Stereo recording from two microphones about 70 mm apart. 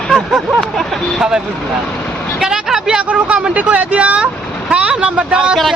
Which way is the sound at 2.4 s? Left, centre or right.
Centre.